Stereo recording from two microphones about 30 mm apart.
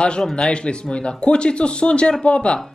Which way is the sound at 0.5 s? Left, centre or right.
Left.